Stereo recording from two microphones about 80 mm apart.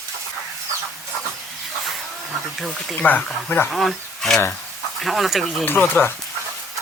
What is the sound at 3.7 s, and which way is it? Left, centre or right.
Speech, centre.